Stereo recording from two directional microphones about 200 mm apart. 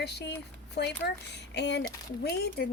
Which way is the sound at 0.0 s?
55° left (ahead or behind).